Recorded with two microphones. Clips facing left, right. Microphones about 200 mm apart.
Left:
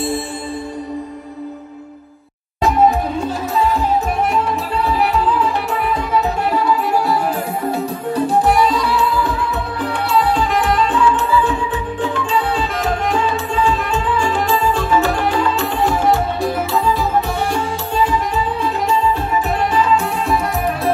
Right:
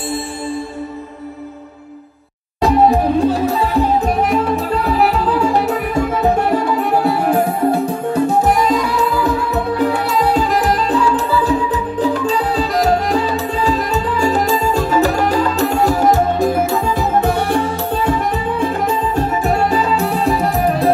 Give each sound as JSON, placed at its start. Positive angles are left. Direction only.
{"t": 2.6, "sound": "music", "side_deg": -35}
{"t": 5.3, "sound": "music", "side_deg": -40}
{"t": 8.5, "sound": "music", "side_deg": -40}